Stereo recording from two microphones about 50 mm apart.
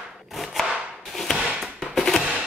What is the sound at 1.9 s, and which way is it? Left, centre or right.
Music, centre.